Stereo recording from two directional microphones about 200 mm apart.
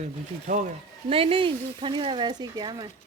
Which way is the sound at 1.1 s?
25° right (ahead or behind).